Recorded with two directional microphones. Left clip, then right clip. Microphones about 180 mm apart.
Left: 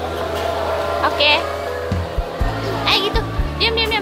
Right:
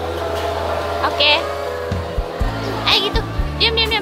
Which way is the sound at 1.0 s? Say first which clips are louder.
Even; centre (ahead or behind).